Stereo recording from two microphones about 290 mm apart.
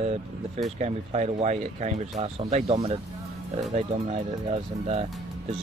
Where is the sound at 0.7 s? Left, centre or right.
Right.